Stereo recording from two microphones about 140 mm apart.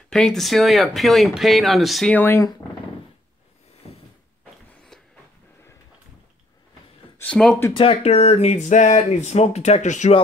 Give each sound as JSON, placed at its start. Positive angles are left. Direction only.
{"t": 0.1, "sound": "speech", "side_deg": 5}
{"t": 2.1, "sound": "speech", "side_deg": 15}
{"t": 7.2, "sound": "speech", "side_deg": 5}
{"t": 7.7, "sound": "speech", "side_deg": 45}